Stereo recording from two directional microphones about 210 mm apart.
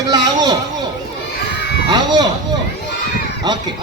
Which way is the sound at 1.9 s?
20° right (ahead or behind).